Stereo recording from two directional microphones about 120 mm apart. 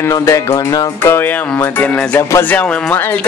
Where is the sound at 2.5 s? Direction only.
15° left (ahead or behind).